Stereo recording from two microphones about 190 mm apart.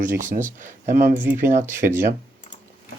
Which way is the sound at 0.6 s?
45° right (ahead or behind).